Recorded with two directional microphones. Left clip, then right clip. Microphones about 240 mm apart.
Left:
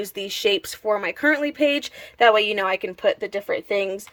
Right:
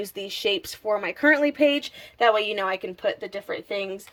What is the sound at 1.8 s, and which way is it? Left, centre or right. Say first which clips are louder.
Speech: left 4 dB; centre.